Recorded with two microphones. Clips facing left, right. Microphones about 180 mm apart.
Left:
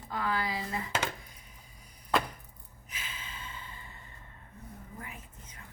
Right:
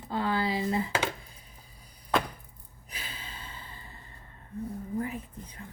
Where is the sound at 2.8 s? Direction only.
35° right (ahead or behind).